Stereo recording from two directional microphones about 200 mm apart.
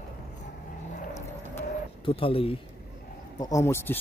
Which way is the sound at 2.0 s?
25° left (ahead or behind).